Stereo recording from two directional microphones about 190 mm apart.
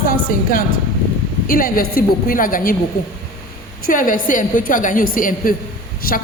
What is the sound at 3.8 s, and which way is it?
A woman's voice, 45° left (ahead or behind).